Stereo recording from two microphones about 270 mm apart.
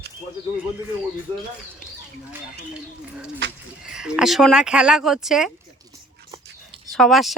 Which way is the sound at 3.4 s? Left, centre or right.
Right.